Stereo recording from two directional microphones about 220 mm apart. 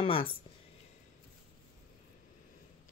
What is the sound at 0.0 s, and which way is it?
Speech, 25° left (ahead or behind).